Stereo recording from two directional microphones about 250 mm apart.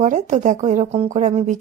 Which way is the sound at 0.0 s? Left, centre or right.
Right.